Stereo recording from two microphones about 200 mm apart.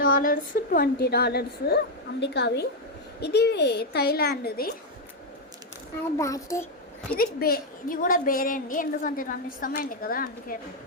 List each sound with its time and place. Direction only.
0.0 s a woman's voice: 45° left (ahead or behind)
6.1 s a child's voice: 15° left (ahead or behind)
7.2 s a woman's voice: 50° left (ahead or behind)